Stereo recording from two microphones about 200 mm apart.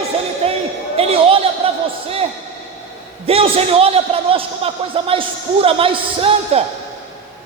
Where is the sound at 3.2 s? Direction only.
30° right (ahead or behind).